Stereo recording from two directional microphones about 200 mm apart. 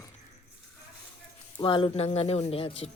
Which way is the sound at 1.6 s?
25° left (ahead or behind).